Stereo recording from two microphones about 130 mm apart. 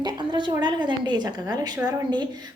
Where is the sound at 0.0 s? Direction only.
35° right (ahead or behind).